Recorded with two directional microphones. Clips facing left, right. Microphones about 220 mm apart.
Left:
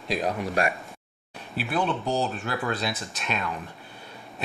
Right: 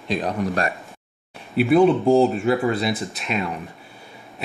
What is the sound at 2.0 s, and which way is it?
Speech, 30° right (ahead or behind).